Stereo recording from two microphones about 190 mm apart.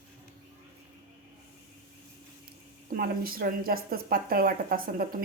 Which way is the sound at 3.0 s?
50° right (ahead or behind).